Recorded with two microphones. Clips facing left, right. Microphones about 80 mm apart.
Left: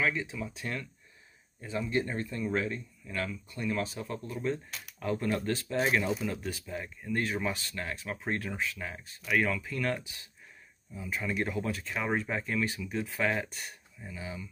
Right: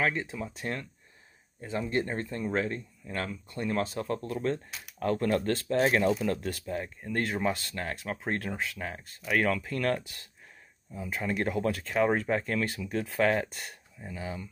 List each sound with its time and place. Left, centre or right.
0.0 s speech: right
6.2 s speech: right
9.4 s speech: right